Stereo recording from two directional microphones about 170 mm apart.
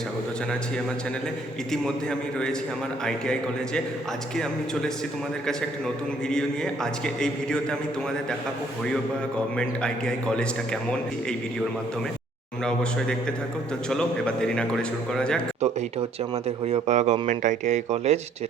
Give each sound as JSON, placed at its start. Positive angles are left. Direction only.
{"t": 1.7, "sound": "a man's voice", "side_deg": 5}
{"t": 4.4, "sound": "a man's voice", "side_deg": 5}
{"t": 7.0, "sound": "a man's voice", "side_deg": 5}
{"t": 9.6, "sound": "a man's voice", "side_deg": 5}
{"t": 13.9, "sound": "a man's voice", "side_deg": 5}
{"t": 15.6, "sound": "speech", "side_deg": -40}